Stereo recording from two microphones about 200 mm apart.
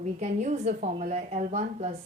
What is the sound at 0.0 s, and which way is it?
Speech, 35° right (ahead or behind).